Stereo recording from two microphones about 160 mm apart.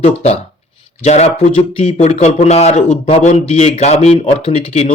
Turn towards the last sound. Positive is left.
turn(degrees=45)  # may be behind; listen again after turning